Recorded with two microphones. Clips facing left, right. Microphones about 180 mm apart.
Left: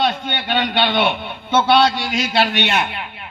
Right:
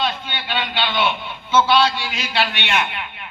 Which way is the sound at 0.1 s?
50° left (ahead or behind).